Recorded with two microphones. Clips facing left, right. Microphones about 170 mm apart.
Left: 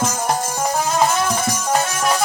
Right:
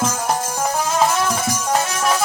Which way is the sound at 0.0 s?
5° left (ahead or behind).